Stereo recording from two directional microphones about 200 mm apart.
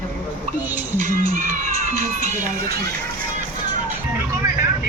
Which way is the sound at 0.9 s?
40° right (ahead or behind).